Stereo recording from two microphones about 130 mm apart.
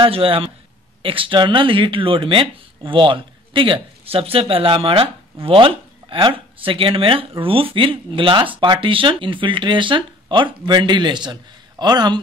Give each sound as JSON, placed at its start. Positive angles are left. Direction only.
{"t": 0.0, "sound": "speech", "side_deg": -45}